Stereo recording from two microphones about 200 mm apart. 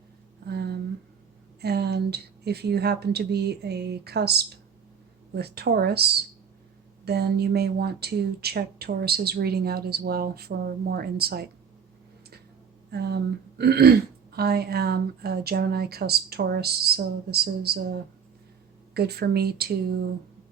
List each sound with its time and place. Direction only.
0.4 s a sound: 55° right (ahead or behind)
1.6 s speech: 55° right (ahead or behind)
12.9 s speech: 55° right (ahead or behind)